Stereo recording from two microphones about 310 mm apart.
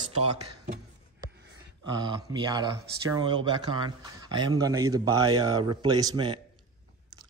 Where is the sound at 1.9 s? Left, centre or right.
Centre.